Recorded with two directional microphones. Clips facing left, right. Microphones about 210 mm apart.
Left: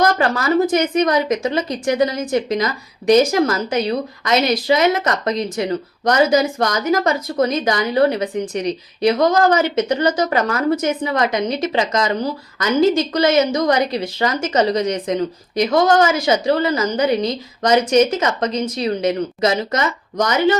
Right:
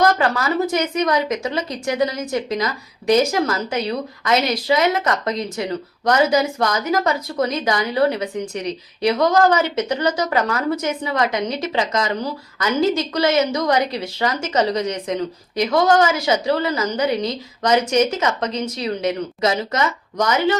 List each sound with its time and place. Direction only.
0.2 s a woman's voice: 45° left (ahead or behind)
3.8 s a woman's voice: 40° left (ahead or behind)